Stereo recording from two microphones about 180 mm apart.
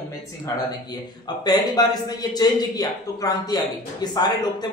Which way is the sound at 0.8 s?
25° left (ahead or behind).